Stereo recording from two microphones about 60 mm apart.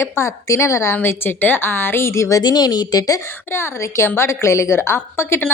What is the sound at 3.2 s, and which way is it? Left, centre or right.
A woman's voice, left.